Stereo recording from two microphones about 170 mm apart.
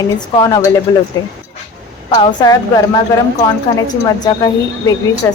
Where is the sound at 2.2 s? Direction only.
25° left (ahead or behind).